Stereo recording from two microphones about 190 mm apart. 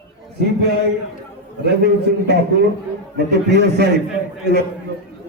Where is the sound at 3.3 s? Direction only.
65° right (ahead or behind).